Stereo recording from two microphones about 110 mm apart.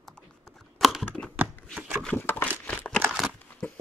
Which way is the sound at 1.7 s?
15° right (ahead or behind).